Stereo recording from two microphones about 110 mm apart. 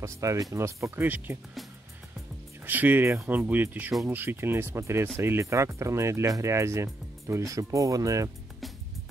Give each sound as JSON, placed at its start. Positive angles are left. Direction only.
{"t": 0.0, "sound": "speech", "side_deg": -30}
{"t": 2.6, "sound": "speech", "side_deg": -15}